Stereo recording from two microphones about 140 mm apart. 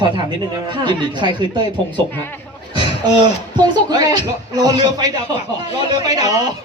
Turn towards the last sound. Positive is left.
turn(degrees=-25)  # may be behind; listen again after turning